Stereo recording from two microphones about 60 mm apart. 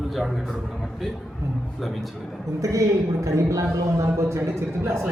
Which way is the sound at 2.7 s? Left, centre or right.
Right.